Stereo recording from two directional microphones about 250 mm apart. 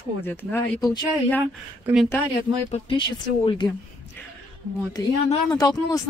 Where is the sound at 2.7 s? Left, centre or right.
Left.